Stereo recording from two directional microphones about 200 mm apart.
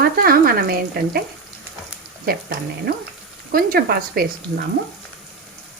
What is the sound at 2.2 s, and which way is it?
Speech, 50° right (ahead or behind).